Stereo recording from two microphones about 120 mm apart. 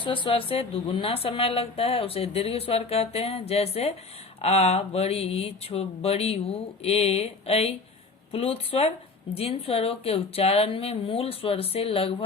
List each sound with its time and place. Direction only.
0.0 s a woman's voice: 45° left (ahead or behind)